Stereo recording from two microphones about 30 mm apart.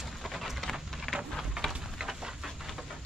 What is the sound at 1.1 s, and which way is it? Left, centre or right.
Rain, left.